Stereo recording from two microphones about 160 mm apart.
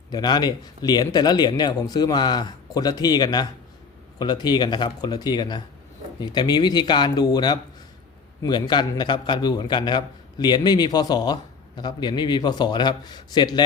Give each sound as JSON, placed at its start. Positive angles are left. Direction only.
{"t": 0.1, "sound": "speech", "side_deg": 25}